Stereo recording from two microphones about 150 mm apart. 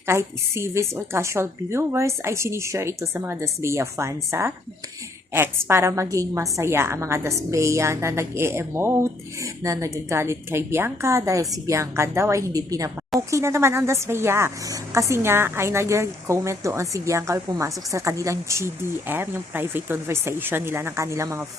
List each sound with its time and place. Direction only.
0.0 s a woman's voice: 15° right (ahead or behind)